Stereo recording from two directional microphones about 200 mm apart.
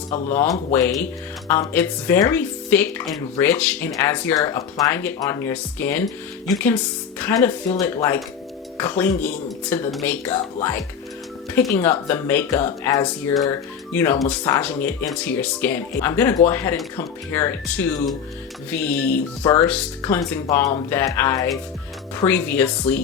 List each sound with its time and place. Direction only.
0.3 s speech: 15° left (ahead or behind)
7.2 s speech: 10° left (ahead or behind)